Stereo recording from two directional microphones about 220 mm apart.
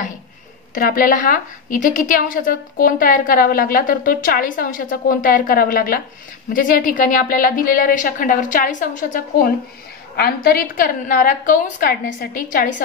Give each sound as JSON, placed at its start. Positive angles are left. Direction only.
{"t": 0.7, "sound": "a woman's voice", "side_deg": 40}